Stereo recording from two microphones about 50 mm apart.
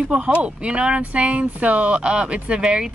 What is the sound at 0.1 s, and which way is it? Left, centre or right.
Speech, right.